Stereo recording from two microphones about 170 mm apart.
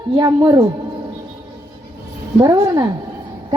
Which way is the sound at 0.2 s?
20° right (ahead or behind).